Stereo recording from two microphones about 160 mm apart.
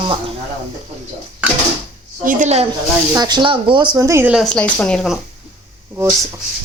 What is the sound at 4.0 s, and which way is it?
Speech, 15° right (ahead or behind).